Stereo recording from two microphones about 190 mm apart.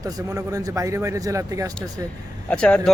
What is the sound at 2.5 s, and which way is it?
Speech, 5° left (ahead or behind).